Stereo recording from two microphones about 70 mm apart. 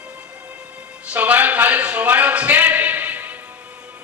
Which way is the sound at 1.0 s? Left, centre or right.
Right.